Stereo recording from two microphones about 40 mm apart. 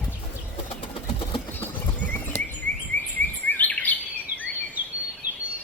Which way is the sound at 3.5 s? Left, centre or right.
Left.